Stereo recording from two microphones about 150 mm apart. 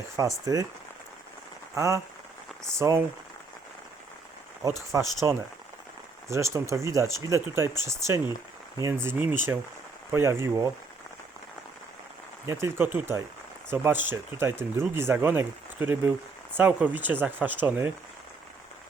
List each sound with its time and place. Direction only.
0.2 s speech: 25° right (ahead or behind)
1.7 s speech: 20° right (ahead or behind)
4.9 s speech: 15° right (ahead or behind)
12.5 s speech: 20° right (ahead or behind)